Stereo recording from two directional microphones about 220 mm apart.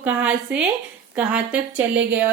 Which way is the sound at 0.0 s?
5° right (ahead or behind).